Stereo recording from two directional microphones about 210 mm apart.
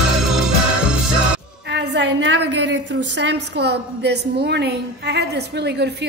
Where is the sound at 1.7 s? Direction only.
55° right (ahead or behind).